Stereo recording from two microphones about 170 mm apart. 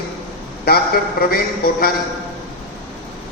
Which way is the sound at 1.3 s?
60° left (ahead or behind).